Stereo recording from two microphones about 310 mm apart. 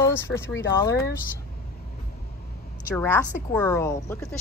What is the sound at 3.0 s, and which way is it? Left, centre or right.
A woman's voice, centre.